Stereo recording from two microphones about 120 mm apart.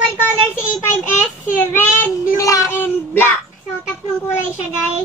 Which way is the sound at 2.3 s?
25° left (ahead or behind).